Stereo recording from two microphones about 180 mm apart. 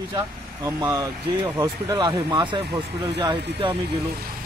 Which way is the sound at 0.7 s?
20° right (ahead or behind).